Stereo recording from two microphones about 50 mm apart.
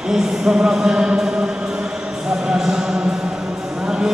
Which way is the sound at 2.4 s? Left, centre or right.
Centre.